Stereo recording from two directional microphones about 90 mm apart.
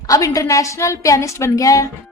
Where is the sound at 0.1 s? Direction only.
40° left (ahead or behind).